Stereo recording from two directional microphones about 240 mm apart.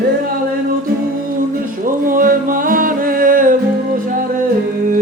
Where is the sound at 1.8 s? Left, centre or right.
Right.